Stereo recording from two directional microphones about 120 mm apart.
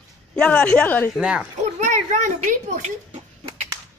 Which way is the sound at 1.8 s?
90° right.